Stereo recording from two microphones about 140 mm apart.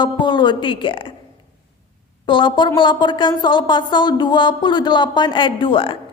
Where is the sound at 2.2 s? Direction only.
35° left (ahead or behind).